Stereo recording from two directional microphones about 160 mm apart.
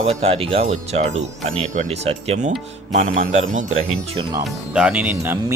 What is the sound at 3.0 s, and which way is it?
Speech, 50° right (ahead or behind).